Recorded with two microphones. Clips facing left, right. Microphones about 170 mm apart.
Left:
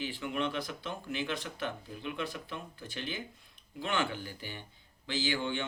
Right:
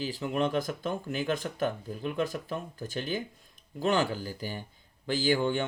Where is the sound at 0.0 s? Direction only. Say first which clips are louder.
Right 5 dB; 35° right (ahead or behind).